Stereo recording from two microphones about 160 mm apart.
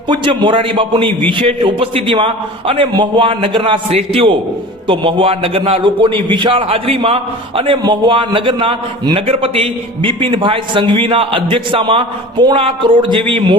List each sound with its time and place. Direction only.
0.1 s a man's voice: 30° right (ahead or behind)